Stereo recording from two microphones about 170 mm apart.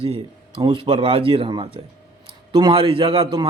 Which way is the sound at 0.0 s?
35° right (ahead or behind).